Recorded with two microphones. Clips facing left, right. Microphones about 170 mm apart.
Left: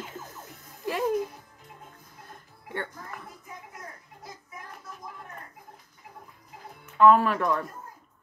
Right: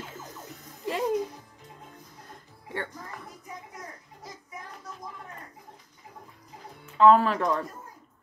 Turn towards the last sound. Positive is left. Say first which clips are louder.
# right 1 dB
turn(degrees=-25)  # may be behind; listen again after turning